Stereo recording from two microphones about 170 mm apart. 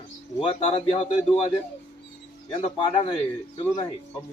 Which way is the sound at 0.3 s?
35° left (ahead or behind).